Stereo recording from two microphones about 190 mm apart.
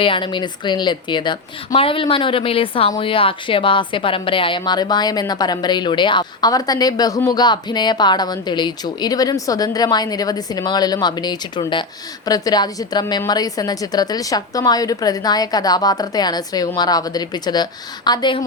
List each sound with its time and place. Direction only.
0.0 s speech: 25° left (ahead or behind)